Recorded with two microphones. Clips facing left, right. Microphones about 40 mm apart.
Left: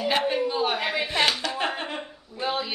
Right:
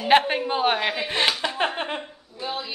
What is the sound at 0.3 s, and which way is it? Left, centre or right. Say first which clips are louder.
Speech: right 2 dB; right.